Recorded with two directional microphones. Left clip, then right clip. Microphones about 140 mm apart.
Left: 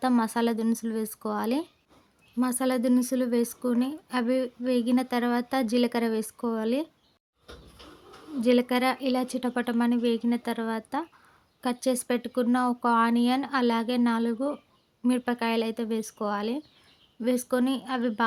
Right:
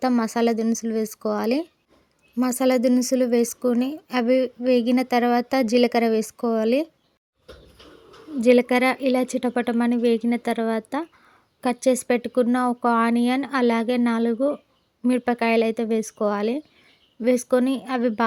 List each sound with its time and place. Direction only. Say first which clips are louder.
0.2 s speech: right 5 dB; 25° right (ahead or behind)
8.4 s speech: right 7 dB; 35° right (ahead or behind)